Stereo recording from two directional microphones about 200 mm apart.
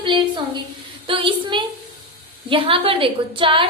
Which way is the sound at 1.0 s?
25° right (ahead or behind).